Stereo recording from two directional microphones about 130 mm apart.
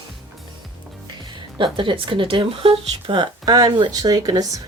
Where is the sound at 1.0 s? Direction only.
35° right (ahead or behind).